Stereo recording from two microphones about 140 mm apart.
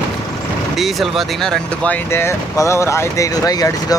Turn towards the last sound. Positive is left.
turn(degrees=25)  # may be behind; listen again after turning